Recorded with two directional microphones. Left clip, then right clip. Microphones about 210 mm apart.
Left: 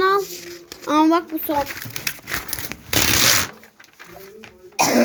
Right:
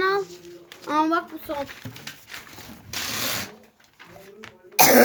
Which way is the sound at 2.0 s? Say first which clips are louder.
Left 14 dB; 55° left (ahead or behind).